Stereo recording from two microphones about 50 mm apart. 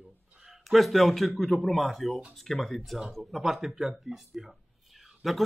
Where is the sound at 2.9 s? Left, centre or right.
Centre.